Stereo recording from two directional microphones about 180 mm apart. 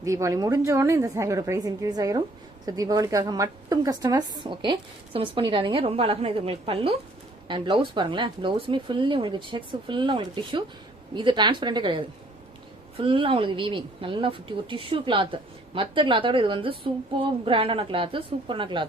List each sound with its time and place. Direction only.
0.0 s a woman's voice: 15° right (ahead or behind)